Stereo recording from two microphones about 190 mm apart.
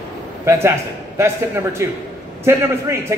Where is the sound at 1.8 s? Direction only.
15° right (ahead or behind).